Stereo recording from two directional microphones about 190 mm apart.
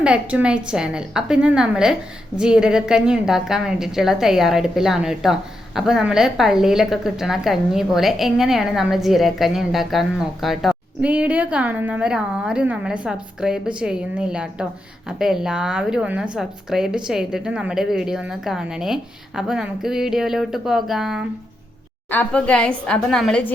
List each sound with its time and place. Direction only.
0.0 s a woman's voice: 5° right (ahead or behind)